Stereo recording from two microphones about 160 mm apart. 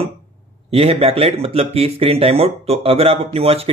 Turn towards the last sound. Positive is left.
turn(degrees=-40)  # may be behind; listen again after turning